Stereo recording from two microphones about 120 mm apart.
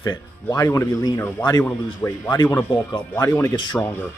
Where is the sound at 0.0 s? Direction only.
35° left (ahead or behind); by 3.9 s 10° left (ahead or behind).